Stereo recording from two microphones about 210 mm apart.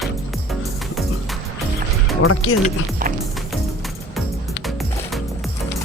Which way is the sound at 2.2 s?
80° left.